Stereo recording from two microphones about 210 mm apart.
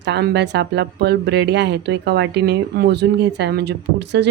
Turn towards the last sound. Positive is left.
turn(degrees=-55)  # may be behind; listen again after turning